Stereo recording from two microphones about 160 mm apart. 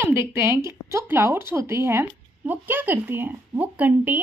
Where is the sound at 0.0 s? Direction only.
15° right (ahead or behind).